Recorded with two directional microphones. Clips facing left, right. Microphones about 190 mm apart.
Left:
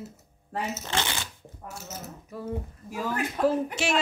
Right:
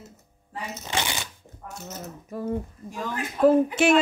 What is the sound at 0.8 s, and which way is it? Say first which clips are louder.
Speech: right 6 dB; 15° right (ahead or behind).